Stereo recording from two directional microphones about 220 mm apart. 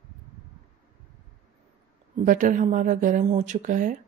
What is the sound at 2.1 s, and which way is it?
Speech, 35° right (ahead or behind).